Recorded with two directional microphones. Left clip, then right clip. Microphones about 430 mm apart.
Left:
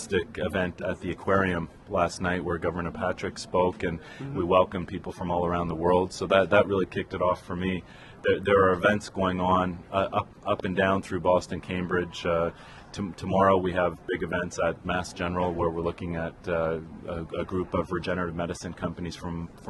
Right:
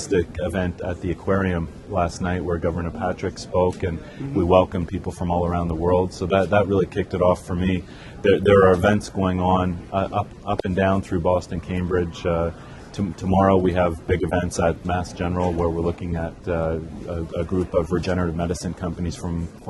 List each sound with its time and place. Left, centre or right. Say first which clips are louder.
0.1 s speech: right 5 dB; centre